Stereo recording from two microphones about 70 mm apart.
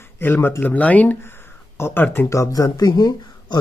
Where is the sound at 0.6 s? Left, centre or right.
Left.